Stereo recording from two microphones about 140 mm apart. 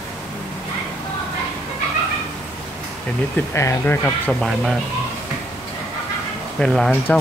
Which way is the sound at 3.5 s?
20° left (ahead or behind).